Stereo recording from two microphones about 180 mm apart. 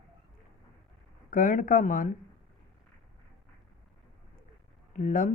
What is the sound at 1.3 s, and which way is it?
Speech, 50° left (ahead or behind).